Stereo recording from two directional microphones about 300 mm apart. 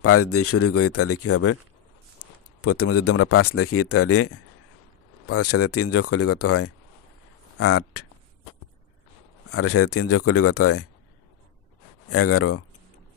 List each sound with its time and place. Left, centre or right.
0.0 s speech: left
2.6 s speech: left
9.5 s speech: left
12.1 s speech: left